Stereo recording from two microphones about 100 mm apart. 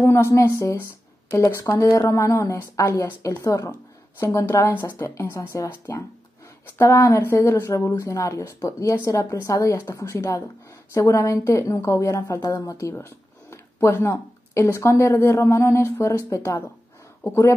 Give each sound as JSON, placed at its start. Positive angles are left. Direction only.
{"t": 0.0, "sound": "a woman's voice", "side_deg": 25}